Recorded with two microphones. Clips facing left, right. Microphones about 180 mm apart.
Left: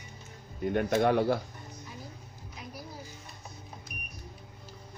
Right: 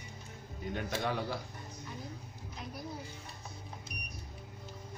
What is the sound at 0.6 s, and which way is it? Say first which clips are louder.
Speech: left 10 dB; 55° left (ahead or behind).